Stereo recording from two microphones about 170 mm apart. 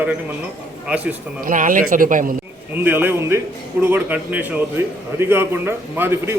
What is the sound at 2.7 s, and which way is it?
A man's voice, 10° right (ahead or behind).